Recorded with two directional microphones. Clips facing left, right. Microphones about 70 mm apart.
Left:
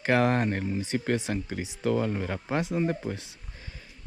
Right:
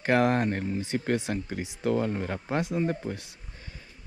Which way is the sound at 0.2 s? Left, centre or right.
Left.